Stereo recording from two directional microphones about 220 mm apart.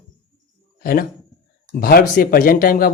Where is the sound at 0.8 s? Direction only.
40° left (ahead or behind).